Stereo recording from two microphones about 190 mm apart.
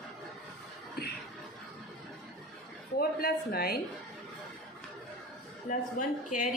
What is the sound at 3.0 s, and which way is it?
Speech, 50° left (ahead or behind).